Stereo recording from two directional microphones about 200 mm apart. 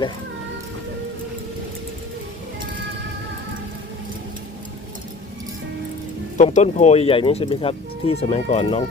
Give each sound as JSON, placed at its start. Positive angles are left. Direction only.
{"t": 6.3, "sound": "speech", "side_deg": 35}